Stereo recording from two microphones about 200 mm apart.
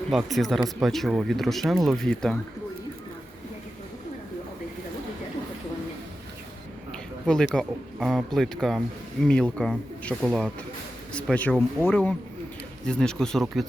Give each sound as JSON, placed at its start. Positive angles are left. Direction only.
{"t": 0.1, "sound": "speech", "side_deg": 0}
{"t": 6.9, "sound": "speech", "side_deg": 5}